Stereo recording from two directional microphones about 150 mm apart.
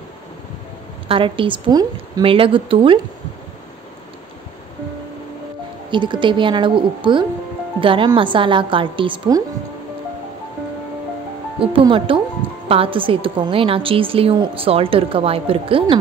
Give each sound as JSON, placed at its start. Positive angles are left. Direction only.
{"t": 1.0, "sound": "a woman's voice", "side_deg": -35}
{"t": 2.2, "sound": "a woman's voice", "side_deg": -35}
{"t": 5.9, "sound": "a woman's voice", "side_deg": -30}
{"t": 11.6, "sound": "a woman's voice", "side_deg": -35}